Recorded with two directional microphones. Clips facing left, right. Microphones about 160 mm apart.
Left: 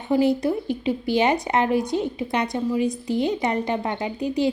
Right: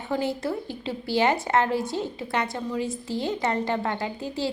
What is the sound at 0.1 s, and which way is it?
Speech, 15° left (ahead or behind).